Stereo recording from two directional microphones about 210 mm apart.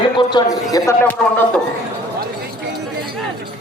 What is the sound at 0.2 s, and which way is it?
A man's voice, 20° left (ahead or behind).